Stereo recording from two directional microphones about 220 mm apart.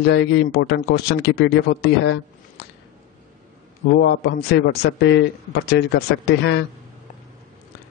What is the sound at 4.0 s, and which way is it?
Speech, 50° left (ahead or behind).